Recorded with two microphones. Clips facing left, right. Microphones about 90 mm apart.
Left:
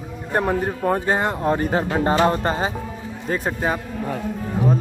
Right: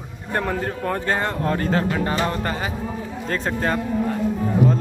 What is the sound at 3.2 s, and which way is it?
Speech, 15° left (ahead or behind).